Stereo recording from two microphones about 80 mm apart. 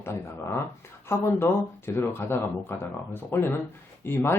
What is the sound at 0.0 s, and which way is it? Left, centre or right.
Speech, left.